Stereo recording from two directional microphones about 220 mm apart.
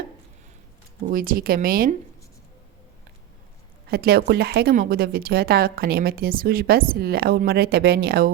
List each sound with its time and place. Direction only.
1.1 s speech: 40° right (ahead or behind)
3.8 s a woman's voice: 45° right (ahead or behind)